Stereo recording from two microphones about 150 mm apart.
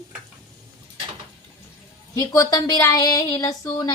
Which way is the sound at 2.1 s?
20° left (ahead or behind).